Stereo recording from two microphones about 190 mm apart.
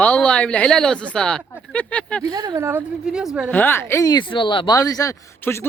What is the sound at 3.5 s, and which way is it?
Speech, 10° left (ahead or behind).